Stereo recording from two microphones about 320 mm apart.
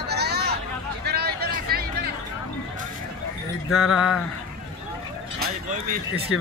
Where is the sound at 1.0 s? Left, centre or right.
Right.